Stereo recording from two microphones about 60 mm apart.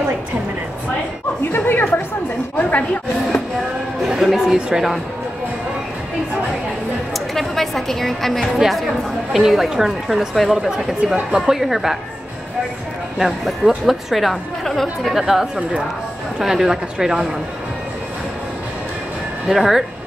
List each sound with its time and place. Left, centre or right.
1.5 s a woman's voice: left
4.1 s a woman's voice: centre
4.6 s speech: centre
7.3 s a woman's voice: centre
13.5 s a woman's voice: centre
19.4 s a woman's voice: centre